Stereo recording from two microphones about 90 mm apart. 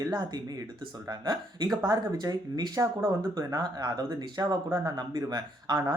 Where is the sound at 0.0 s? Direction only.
50° right (ahead or behind).